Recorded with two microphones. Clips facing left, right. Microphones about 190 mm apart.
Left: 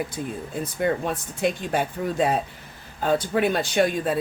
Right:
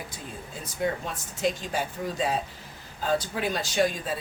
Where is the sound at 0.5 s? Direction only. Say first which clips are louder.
Left 5 dB; 55° left (ahead or behind).